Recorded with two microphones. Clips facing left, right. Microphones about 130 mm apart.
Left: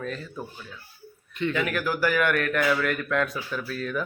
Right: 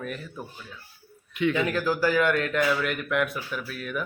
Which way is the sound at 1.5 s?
25° right (ahead or behind).